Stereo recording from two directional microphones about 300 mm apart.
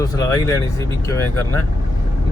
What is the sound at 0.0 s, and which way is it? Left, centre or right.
Speech, centre.